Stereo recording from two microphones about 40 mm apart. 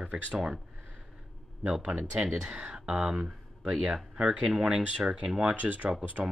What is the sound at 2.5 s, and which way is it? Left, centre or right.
Speech, centre.